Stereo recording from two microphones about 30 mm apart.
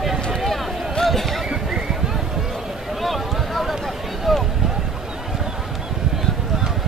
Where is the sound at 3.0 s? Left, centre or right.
Centre.